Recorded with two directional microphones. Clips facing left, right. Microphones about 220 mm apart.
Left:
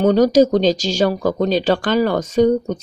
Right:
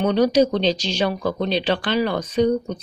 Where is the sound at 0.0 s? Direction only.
45° left (ahead or behind).